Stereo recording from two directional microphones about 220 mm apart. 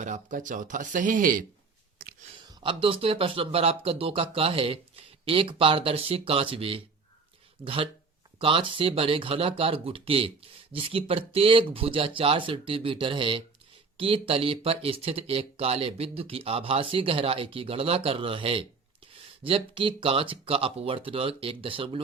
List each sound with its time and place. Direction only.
0.0 s speech: 35° right (ahead or behind)
2.6 s speech: 25° right (ahead or behind)